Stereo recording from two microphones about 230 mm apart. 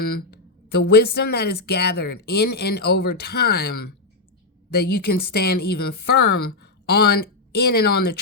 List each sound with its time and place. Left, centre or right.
0.8 s a woman's voice: left
4.7 s a woman's voice: left